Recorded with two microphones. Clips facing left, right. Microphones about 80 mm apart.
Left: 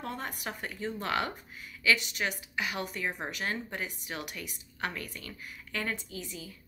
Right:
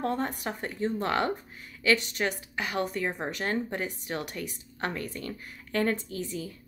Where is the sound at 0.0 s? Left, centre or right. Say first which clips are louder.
Right 7 dB; right.